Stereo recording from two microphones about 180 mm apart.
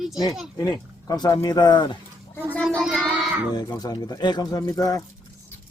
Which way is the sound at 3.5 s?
25° left (ahead or behind).